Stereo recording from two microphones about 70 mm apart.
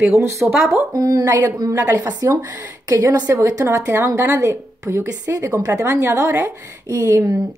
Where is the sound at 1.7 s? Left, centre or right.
Right.